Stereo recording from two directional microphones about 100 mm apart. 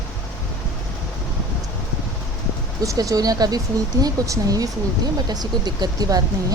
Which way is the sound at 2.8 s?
35° right (ahead or behind).